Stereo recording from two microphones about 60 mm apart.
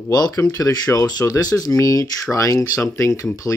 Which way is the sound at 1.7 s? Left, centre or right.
Left.